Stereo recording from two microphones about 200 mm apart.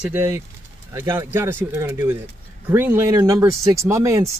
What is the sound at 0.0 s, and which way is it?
Speech, 10° right (ahead or behind).